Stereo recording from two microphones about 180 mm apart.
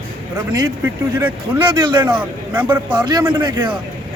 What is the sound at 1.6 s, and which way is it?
Speech, 25° right (ahead or behind).